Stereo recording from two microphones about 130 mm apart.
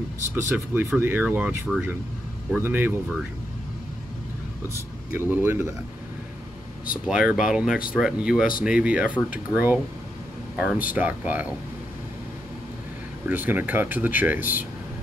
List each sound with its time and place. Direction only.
0.4 s speech: 20° right (ahead or behind)
5.1 s speech: 15° right (ahead or behind)
7.1 s speech: 5° right (ahead or behind)
13.3 s speech: 15° right (ahead or behind)